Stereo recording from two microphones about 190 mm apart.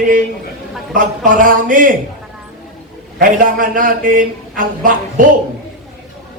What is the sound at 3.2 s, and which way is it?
A man's voice, 45° right (ahead or behind).